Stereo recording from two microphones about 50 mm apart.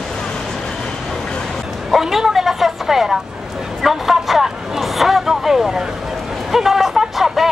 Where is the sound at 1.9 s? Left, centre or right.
Centre.